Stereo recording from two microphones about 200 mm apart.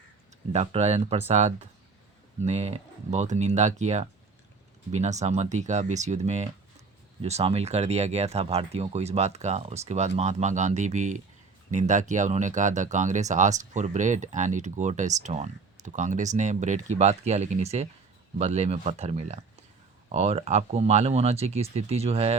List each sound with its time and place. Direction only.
0.5 s speech: 30° right (ahead or behind)